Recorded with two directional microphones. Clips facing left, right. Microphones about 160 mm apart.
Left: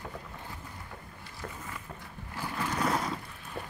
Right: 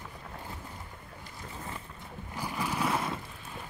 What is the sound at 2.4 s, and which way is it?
Vehicle, 15° right (ahead or behind).